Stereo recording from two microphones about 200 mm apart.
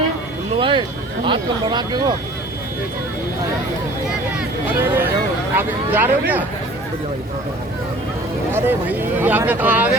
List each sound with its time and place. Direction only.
0.6 s speech: 25° right (ahead or behind)
4.8 s speech: 10° right (ahead or behind)
8.5 s speech: 10° right (ahead or behind)